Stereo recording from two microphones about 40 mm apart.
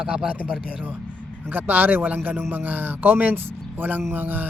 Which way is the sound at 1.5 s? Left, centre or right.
Right.